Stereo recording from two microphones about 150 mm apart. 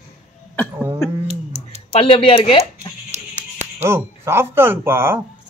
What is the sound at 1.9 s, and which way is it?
Speech, 40° left (ahead or behind).